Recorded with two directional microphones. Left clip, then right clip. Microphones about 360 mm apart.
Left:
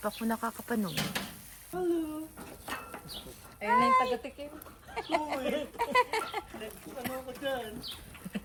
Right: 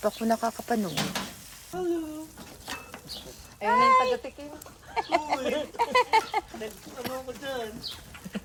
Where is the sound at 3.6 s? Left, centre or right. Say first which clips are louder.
Right 5 dB; centre.